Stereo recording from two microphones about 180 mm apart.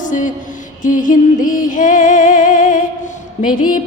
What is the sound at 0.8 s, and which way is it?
Music, 45° left (ahead or behind).